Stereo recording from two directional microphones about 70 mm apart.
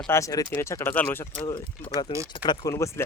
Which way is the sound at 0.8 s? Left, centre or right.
Left.